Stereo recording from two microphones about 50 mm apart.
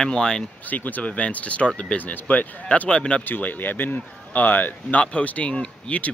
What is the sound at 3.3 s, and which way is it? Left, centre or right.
Speech, left.